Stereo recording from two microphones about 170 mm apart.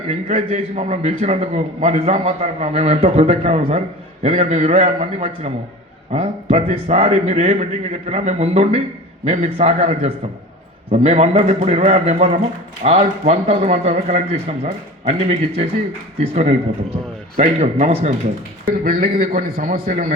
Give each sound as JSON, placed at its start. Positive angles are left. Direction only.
{"t": 0.1, "sound": "a man's voice", "side_deg": -35}
{"t": 18.6, "sound": "a man's voice", "side_deg": -60}